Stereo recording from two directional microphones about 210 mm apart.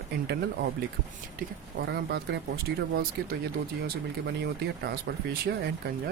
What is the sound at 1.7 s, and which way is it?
Speech, 50° right (ahead or behind).